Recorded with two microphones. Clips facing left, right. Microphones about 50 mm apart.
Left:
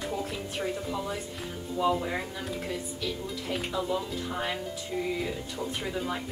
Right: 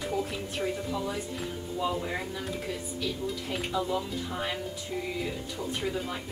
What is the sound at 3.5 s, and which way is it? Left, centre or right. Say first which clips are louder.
Speech: left 1 dB; centre.